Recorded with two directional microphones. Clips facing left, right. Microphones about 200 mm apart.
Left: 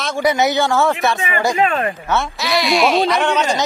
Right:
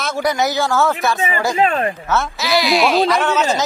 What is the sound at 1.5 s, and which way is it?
Speech, 35° right (ahead or behind).